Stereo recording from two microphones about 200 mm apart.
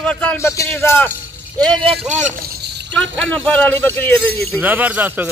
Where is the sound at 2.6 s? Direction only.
65° right (ahead or behind).